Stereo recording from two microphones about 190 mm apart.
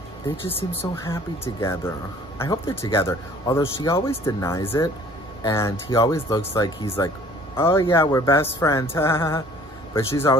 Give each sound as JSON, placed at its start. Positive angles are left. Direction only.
{"t": 0.5, "sound": "speech", "side_deg": 10}